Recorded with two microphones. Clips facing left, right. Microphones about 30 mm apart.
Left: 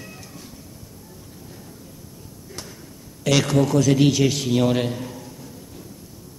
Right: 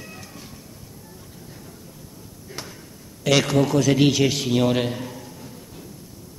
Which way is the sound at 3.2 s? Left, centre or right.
Centre.